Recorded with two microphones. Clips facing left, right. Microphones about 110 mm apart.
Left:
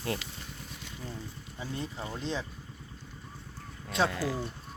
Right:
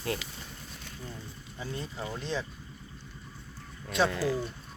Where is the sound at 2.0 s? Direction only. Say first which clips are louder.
Right 2 dB; 20° left (ahead or behind).